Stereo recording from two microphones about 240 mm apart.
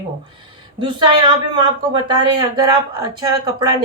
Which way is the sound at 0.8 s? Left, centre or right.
Centre.